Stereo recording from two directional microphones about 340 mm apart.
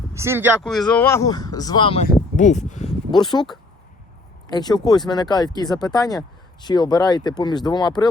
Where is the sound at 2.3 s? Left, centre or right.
Left.